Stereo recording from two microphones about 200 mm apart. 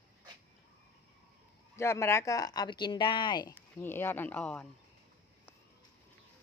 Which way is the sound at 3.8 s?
10° left (ahead or behind).